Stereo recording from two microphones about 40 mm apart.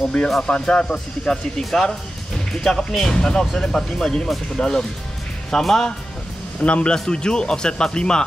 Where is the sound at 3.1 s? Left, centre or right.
Centre.